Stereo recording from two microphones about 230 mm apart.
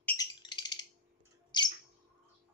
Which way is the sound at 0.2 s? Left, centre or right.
Centre.